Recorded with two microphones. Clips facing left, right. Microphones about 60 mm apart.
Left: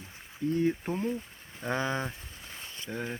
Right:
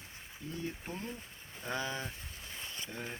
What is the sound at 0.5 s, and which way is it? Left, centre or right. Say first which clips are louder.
Speech: left 12 dB; left.